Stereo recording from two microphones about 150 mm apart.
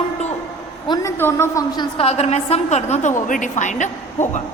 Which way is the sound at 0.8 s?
25° left (ahead or behind).